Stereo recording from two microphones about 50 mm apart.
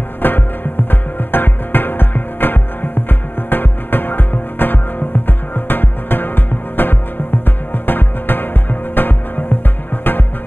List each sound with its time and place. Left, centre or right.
0.2 s music: left